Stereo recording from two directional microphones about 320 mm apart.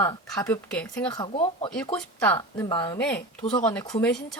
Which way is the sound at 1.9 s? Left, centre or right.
Centre.